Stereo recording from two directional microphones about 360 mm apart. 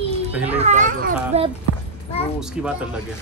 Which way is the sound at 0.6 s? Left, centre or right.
Centre.